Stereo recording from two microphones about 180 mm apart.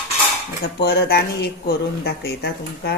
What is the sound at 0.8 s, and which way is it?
Speech, 60° left (ahead or behind).